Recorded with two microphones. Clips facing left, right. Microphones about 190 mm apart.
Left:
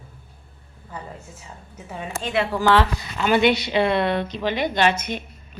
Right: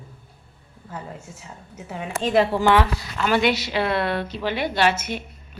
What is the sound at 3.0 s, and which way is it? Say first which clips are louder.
A woman's voice: left 2 dB; centre (ahead or behind).